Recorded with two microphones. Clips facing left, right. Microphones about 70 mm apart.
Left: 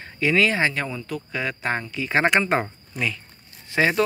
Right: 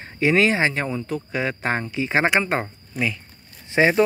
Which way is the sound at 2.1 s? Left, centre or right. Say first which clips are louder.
Left 1 dB; centre.